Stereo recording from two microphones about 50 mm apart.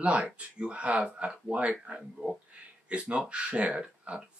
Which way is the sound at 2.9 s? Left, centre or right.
Right.